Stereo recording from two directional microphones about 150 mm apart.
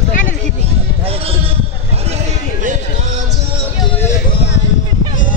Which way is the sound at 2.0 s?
50° right (ahead or behind).